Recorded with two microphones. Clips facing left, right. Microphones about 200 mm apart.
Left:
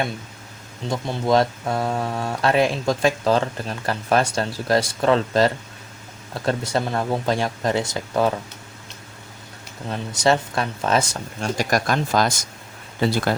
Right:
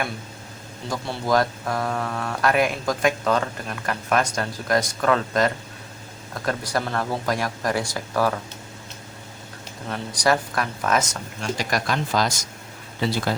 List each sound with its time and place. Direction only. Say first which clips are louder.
0.9 s speech: left 3 dB; 20° left (ahead or behind)
9.9 s speech: left 2 dB; 25° left (ahead or behind)
11.5 s speech: left 4 dB; 45° left (ahead or behind)